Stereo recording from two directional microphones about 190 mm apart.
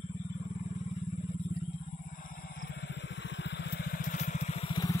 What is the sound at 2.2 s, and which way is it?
Vehicle, 45° left (ahead or behind).